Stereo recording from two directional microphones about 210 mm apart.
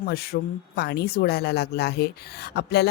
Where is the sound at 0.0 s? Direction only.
50° left (ahead or behind).